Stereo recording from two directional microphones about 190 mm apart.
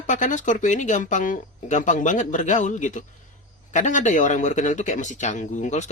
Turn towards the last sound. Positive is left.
turn(degrees=40)  # may be behind; listen again after turning